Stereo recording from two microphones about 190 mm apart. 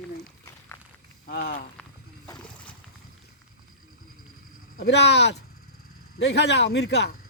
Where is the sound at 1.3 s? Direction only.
55° left (ahead or behind).